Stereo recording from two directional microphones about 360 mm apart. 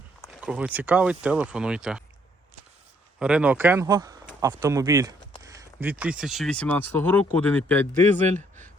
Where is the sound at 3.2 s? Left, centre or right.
Centre.